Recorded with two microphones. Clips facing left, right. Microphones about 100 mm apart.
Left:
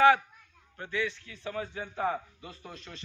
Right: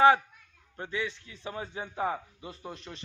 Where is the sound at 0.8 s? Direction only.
20° right (ahead or behind).